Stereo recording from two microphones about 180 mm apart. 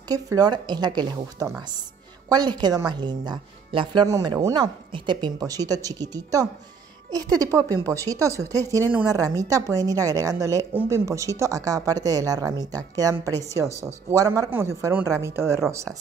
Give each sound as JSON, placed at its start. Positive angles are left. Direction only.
{"t": 0.1, "sound": "a woman's voice", "side_deg": -20}